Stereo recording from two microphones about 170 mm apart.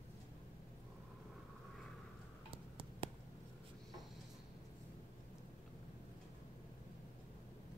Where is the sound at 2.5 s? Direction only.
30° right (ahead or behind).